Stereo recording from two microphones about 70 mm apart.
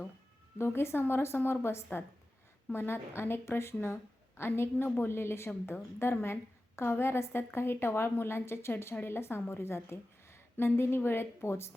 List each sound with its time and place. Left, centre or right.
0.6 s a woman's voice: left